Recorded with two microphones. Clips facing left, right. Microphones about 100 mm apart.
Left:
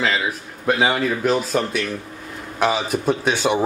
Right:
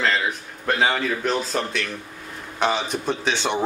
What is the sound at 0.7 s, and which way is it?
Speech, 5° left (ahead or behind).